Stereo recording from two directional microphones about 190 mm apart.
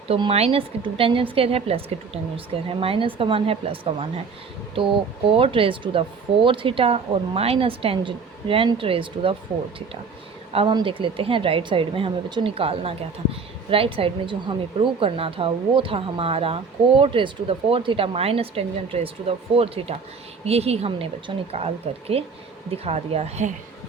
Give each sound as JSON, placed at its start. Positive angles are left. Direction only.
{"t": 0.1, "sound": "speech", "side_deg": -30}
{"t": 5.3, "sound": "speech", "side_deg": -30}
{"t": 10.5, "sound": "speech", "side_deg": -25}